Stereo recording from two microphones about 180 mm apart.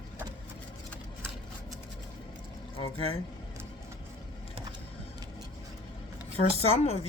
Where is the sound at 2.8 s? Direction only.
30° left (ahead or behind).